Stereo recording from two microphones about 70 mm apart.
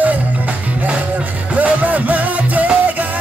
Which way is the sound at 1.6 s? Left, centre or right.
Right.